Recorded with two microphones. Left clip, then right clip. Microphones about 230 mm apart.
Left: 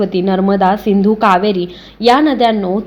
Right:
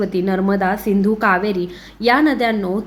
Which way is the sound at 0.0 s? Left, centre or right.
Centre.